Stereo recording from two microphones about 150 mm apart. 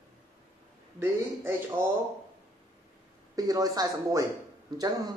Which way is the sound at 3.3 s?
25° right (ahead or behind).